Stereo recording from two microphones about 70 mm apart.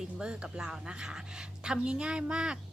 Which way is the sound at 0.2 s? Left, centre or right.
Centre.